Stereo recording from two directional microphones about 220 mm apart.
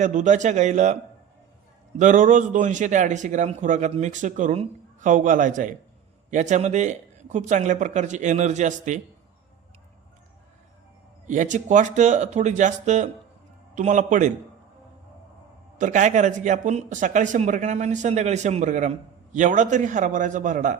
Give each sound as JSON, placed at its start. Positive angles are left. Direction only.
{"t": 0.0, "sound": "speech", "side_deg": -35}
{"t": 2.0, "sound": "speech", "side_deg": -35}
{"t": 11.3, "sound": "speech", "side_deg": -35}
{"t": 15.8, "sound": "speech", "side_deg": -35}